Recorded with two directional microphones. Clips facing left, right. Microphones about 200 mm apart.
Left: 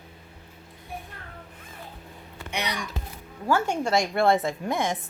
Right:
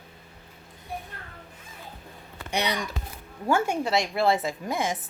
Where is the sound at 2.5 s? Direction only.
30° right (ahead or behind).